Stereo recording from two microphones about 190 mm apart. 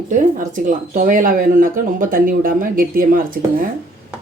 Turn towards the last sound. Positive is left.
turn(degrees=-45)  # may be behind; listen again after turning